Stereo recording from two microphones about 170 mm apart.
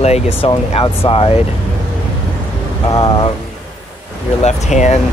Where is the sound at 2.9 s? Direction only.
25° left (ahead or behind).